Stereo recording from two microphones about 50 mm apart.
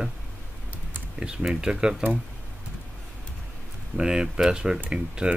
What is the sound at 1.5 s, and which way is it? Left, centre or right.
Speech, centre.